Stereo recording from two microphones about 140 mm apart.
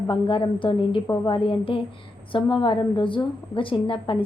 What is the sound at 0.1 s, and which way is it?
A woman's voice, 35° left (ahead or behind).